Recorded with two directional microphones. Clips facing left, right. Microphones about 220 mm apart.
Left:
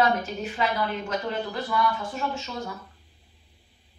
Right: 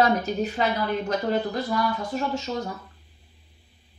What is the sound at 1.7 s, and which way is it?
Speech, 40° right (ahead or behind).